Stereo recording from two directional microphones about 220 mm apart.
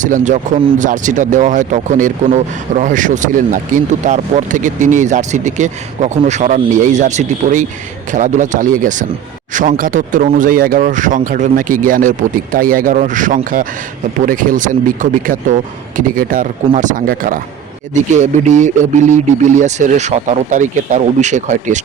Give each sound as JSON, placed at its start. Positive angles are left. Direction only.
{"t": 0.0, "sound": "speech", "side_deg": -35}